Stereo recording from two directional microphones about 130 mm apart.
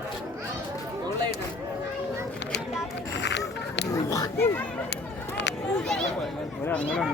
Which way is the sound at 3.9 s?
25° left (ahead or behind).